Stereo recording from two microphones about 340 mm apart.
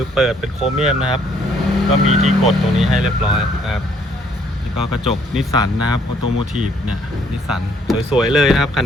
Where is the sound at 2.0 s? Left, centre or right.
Right.